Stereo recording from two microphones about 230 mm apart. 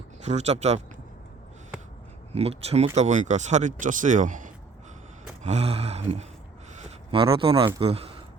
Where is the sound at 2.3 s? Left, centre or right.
Right.